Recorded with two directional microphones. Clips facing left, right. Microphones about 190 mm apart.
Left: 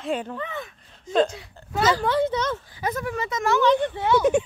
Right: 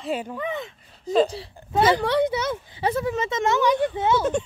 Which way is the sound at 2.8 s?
30° right (ahead or behind).